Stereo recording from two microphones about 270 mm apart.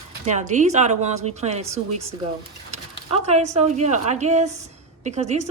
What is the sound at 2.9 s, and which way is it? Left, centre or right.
A woman's voice, right.